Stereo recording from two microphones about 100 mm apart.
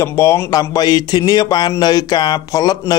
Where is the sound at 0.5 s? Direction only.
40° left (ahead or behind).